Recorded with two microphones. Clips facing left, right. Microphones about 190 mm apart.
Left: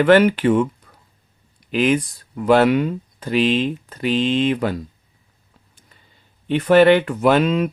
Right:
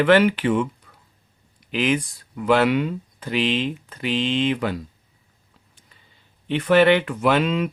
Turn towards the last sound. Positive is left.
turn(degrees=45)  # may be behind; listen again after turning